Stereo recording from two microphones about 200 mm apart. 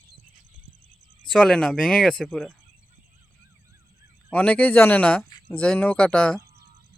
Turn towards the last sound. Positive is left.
turn(degrees=5)  # may be behind; listen again after turning